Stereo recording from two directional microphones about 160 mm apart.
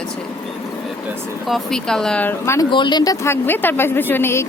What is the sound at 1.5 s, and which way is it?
Speech, centre (ahead or behind).